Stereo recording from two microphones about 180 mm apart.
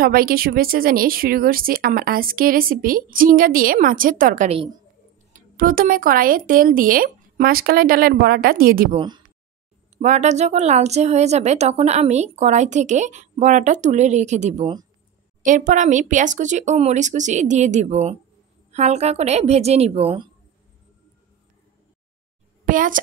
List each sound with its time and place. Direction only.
0.0 s a woman's voice: 55° right (ahead or behind)
8.9 s speech: 25° right (ahead or behind)
10.0 s a woman's voice: 40° right (ahead or behind)
22.7 s a child's voice: 50° right (ahead or behind)